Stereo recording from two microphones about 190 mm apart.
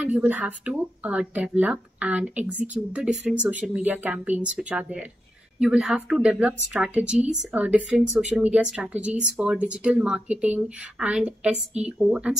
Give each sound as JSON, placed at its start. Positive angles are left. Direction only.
{"t": 0.0, "sound": "speech", "side_deg": -5}